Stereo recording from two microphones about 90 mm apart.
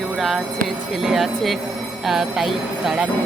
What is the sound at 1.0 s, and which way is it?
Speech, 5° right (ahead or behind).